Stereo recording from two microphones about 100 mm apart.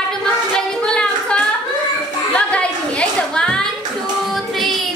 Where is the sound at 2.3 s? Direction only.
10° left (ahead or behind).